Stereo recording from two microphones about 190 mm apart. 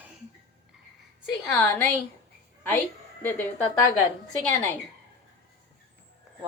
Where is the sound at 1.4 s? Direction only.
10° left (ahead or behind).